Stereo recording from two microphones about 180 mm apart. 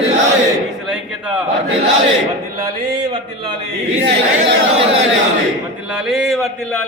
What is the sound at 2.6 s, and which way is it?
Speech, 25° right (ahead or behind).